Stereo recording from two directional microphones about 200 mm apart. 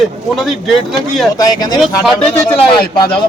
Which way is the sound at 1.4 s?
20° left (ahead or behind).